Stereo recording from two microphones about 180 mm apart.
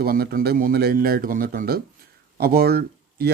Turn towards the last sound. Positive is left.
turn(degrees=-60)  # may be behind; listen again after turning